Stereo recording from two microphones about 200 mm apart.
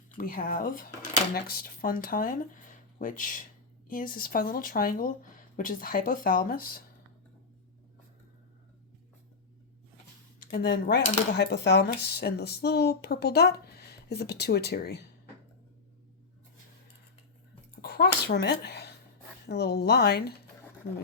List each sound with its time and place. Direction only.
0.2 s cutlery: 45° left (ahead or behind)
10.5 s cutlery: 55° left (ahead or behind)
17.8 s a sound: 55° left (ahead or behind)
19.5 s cutlery: 55° left (ahead or behind)